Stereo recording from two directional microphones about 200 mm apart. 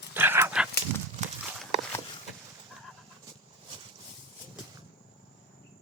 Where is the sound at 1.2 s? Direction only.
35° right (ahead or behind).